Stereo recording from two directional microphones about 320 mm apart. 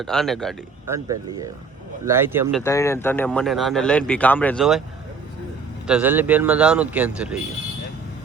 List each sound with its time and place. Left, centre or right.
0.0 s speech: centre
5.9 s speech: centre